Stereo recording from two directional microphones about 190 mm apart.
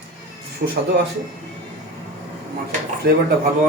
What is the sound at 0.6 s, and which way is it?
Speech, 45° right (ahead or behind).